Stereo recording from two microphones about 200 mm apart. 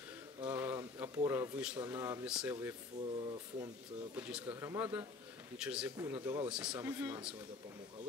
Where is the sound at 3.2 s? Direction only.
25° right (ahead or behind).